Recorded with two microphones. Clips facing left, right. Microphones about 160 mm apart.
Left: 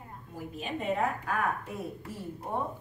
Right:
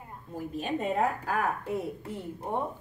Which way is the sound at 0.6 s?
40° right (ahead or behind).